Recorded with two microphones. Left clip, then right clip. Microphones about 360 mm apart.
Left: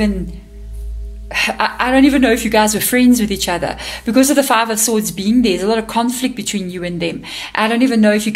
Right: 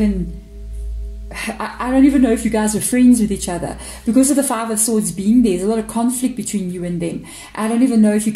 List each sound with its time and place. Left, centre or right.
1.3 s a woman's voice: left